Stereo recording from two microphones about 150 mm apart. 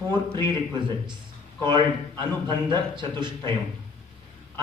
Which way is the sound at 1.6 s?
30° right (ahead or behind).